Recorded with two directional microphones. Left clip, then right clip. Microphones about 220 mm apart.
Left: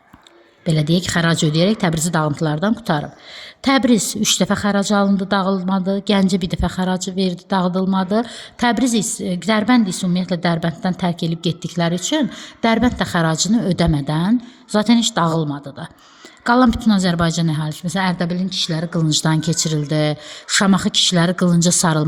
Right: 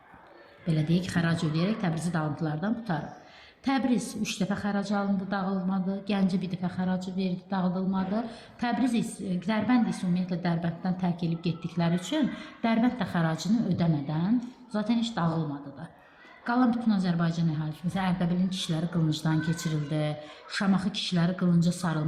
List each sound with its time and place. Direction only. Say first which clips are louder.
0.6 s a woman's voice: left 11 dB; 50° left (ahead or behind)
16.4 s a woman's voice: left 12 dB; 50° left (ahead or behind)